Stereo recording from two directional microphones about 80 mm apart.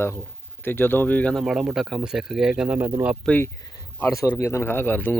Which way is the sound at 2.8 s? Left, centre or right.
Right.